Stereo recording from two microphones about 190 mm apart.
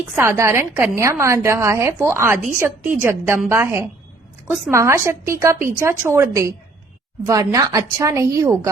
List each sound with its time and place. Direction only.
0.2 s a woman's voice: 15° right (ahead or behind)